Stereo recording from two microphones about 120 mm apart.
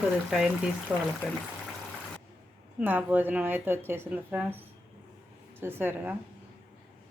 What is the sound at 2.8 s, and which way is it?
Speech, 15° right (ahead or behind).